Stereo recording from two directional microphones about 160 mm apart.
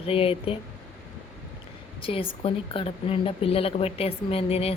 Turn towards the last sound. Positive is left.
turn(degrees=40)  # may be behind; listen again after turning